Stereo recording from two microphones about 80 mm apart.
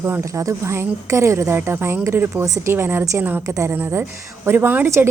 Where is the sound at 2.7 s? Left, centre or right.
Right.